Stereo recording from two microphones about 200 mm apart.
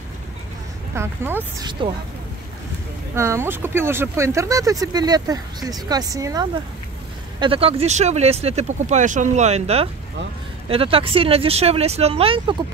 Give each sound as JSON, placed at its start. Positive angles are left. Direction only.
{"t": 0.9, "sound": "speech", "side_deg": -10}
{"t": 3.2, "sound": "speech", "side_deg": -15}